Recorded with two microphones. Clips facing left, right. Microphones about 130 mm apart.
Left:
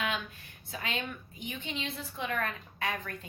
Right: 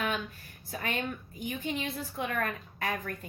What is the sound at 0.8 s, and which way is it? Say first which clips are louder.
A woman's voice: right 3 dB; 50° right (ahead or behind).